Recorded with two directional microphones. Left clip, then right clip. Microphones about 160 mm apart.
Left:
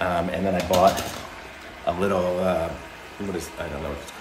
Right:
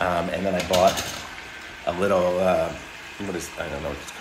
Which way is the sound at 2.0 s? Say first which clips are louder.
Right 4 dB; centre (ahead or behind).